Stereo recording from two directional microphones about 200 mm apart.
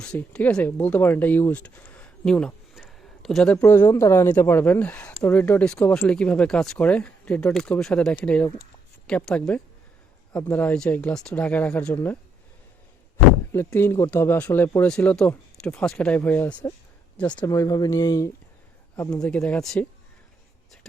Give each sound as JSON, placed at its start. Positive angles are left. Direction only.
{"t": 0.0, "sound": "speech", "side_deg": 5}
{"t": 13.5, "sound": "speech", "side_deg": 10}
{"t": 18.9, "sound": "speech", "side_deg": 5}